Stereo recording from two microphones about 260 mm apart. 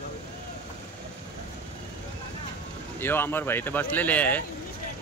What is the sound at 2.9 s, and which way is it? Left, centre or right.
Speech, centre.